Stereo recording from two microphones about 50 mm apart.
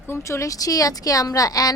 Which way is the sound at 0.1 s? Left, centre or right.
Left.